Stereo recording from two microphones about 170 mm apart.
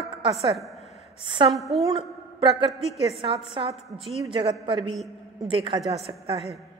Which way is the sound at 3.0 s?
35° right (ahead or behind).